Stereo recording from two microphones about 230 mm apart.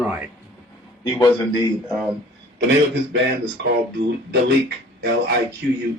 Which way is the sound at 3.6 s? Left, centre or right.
Right.